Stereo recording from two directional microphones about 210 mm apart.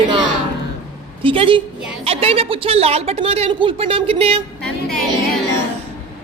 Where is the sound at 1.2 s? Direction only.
25° right (ahead or behind).